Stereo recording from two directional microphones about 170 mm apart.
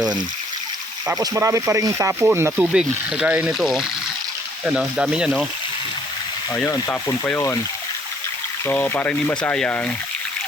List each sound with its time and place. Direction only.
1.2 s speech: 15° right (ahead or behind)
6.5 s speech: 10° left (ahead or behind)
8.6 s speech: 10° left (ahead or behind)